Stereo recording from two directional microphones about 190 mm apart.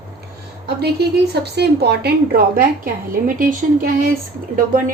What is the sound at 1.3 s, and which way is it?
A woman's voice, 60° right (ahead or behind).